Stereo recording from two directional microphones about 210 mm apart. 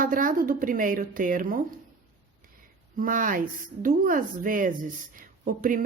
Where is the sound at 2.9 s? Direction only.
40° right (ahead or behind).